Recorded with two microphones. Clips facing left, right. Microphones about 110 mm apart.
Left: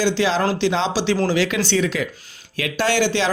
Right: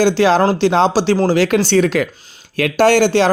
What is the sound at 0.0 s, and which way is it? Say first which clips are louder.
Speech: right 7 dB; 50° right (ahead or behind).